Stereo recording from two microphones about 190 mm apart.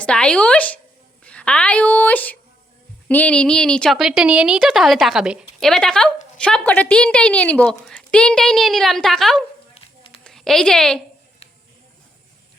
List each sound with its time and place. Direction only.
0.0 s a woman's voice: 5° left (ahead or behind)
9.7 s dog: 30° left (ahead or behind)
10.2 s a woman's voice: 5° left (ahead or behind)